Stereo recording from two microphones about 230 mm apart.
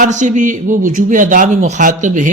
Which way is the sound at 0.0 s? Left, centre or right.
Right.